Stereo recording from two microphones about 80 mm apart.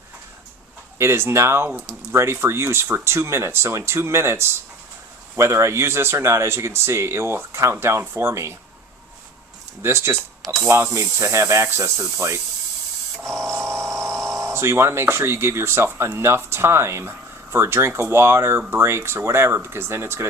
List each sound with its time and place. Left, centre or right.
0.9 s speech: right
9.8 s speech: right
10.4 s speech: centre
10.9 s speech: right
13.6 s a sound: centre
14.3 s speech: right